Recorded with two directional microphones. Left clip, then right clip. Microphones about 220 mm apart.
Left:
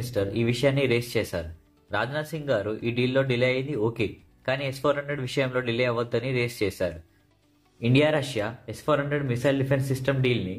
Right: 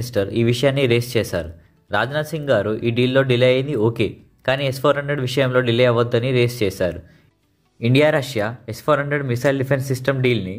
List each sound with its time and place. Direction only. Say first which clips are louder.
0.0 s speech: right 7 dB; 35° right (ahead or behind)